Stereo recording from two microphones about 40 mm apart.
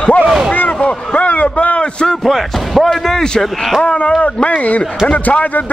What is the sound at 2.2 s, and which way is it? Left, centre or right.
A man's voice, centre.